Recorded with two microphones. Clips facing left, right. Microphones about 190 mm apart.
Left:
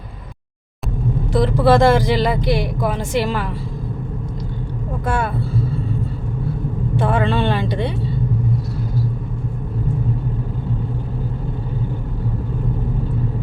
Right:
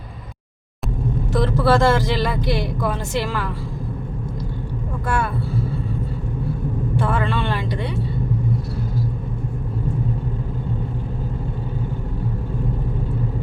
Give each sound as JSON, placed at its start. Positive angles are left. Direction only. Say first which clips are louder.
{"t": 1.3, "sound": "speech", "louder": "left 3 dB", "side_deg": 15}
{"t": 5.0, "sound": "speech", "louder": "left 2 dB", "side_deg": 20}
{"t": 7.0, "sound": "speech", "louder": "left 5 dB", "side_deg": 20}